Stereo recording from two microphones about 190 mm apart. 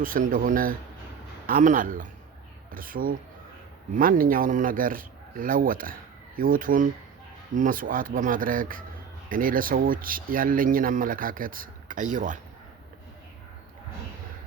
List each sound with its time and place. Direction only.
0.0 s speech: 45° right (ahead or behind)